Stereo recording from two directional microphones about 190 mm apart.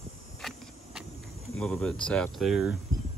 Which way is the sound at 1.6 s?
Centre (ahead or behind).